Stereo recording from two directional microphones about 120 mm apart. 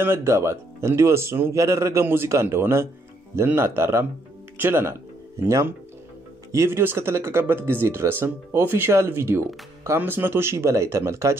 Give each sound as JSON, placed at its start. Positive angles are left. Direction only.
{"t": 0.0, "sound": "speech", "side_deg": -20}